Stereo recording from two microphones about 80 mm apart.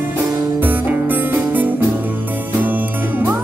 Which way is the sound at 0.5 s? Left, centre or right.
Right.